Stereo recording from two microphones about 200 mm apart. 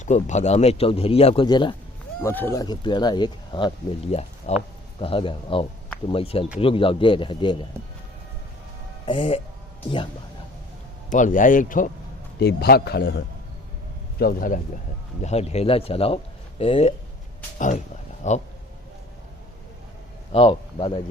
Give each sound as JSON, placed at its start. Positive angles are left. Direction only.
{"t": 0.0, "sound": "speech", "side_deg": 35}
{"t": 2.2, "sound": "speech", "side_deg": 10}
{"t": 9.0, "sound": "speech", "side_deg": 25}
{"t": 11.1, "sound": "speech", "side_deg": 40}
{"t": 12.4, "sound": "a man's voice", "side_deg": 55}
{"t": 14.2, "sound": "a man's voice", "side_deg": 45}
{"t": 15.2, "sound": "speech", "side_deg": 35}
{"t": 18.2, "sound": "speech", "side_deg": 35}
{"t": 20.3, "sound": "speech", "side_deg": 25}